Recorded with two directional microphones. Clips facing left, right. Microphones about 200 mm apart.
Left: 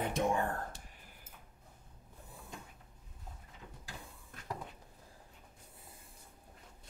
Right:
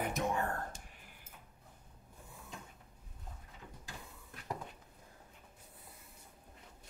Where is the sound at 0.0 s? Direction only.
30° left (ahead or behind).